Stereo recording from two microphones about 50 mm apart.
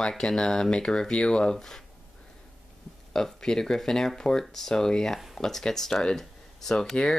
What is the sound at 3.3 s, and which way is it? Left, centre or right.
Speech, centre.